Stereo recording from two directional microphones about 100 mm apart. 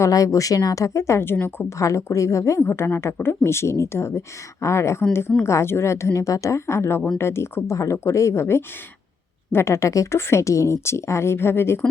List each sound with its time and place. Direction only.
0.0 s a woman's voice: 35° left (ahead or behind)